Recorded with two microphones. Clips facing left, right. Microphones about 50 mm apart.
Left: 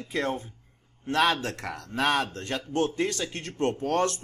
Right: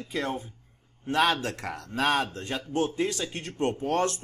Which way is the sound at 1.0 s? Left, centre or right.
Right.